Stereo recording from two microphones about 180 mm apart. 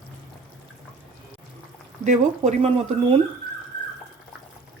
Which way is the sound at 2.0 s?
40° right (ahead or behind).